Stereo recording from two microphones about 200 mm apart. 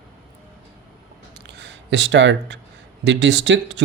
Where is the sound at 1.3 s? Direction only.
60° right (ahead or behind).